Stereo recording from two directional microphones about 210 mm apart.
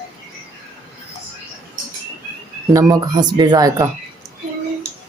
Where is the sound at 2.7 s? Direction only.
20° right (ahead or behind).